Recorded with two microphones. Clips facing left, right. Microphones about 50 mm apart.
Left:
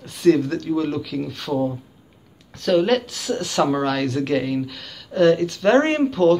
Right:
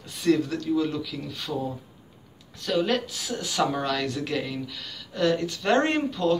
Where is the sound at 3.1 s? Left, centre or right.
Left.